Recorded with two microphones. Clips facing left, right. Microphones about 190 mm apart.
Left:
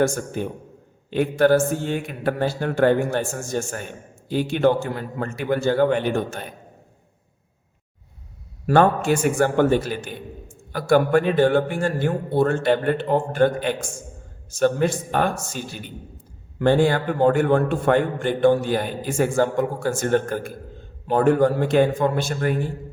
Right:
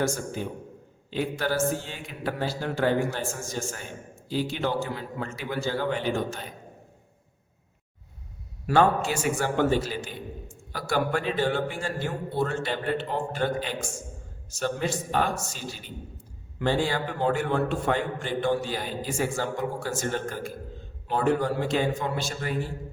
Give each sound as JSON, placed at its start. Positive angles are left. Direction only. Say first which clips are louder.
{"t": 0.0, "sound": "a man's voice", "louder": "left 6 dB", "side_deg": 60}
{"t": 8.6, "sound": "a man's voice", "louder": "left 5 dB", "side_deg": 55}